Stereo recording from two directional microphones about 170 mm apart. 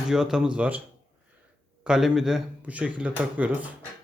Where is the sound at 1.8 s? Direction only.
5° right (ahead or behind).